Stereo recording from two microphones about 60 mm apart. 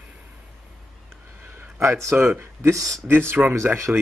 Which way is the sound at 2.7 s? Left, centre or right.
Right.